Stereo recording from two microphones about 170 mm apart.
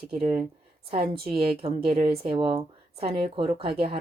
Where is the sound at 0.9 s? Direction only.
30° right (ahead or behind).